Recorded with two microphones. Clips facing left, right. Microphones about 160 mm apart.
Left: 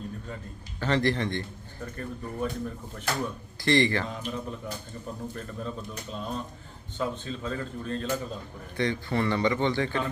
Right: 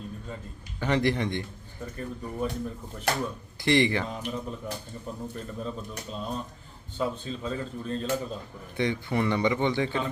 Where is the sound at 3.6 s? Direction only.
15° right (ahead or behind).